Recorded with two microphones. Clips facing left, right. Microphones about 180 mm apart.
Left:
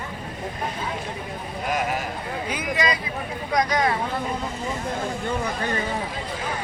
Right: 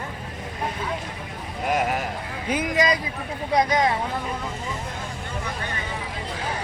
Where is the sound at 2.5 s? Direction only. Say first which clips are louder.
Right 4 dB; 45° right (ahead or behind).